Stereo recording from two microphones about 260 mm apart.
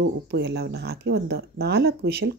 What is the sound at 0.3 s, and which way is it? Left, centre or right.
Speech, right.